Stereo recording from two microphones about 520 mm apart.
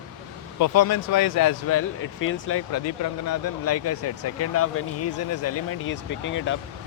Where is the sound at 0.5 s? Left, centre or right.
Left.